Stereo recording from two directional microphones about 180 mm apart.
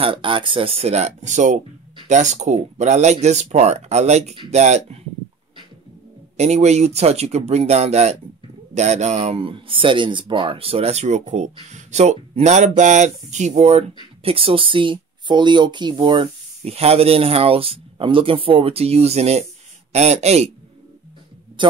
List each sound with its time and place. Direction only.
0.0 s speech: 30° right (ahead or behind)
6.3 s speech: 40° right (ahead or behind)
21.6 s speech: 25° right (ahead or behind)